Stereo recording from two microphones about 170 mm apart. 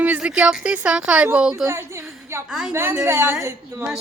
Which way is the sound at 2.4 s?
5° right (ahead or behind).